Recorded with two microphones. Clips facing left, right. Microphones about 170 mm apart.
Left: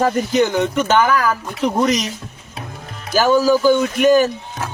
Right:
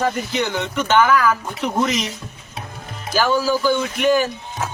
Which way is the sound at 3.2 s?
40° left (ahead or behind).